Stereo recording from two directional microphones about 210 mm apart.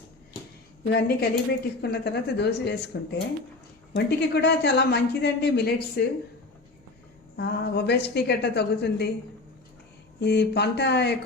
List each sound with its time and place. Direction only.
0.9 s speech: 50° left (ahead or behind)
7.3 s speech: 55° left (ahead or behind)
10.2 s speech: 55° left (ahead or behind)